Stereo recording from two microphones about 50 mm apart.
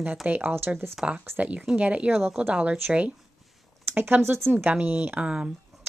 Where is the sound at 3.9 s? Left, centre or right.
Right.